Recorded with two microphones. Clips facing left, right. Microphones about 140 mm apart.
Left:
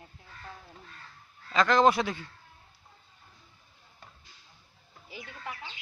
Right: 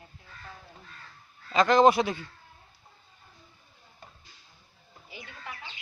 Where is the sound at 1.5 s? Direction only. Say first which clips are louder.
Right 3 dB; 20° right (ahead or behind).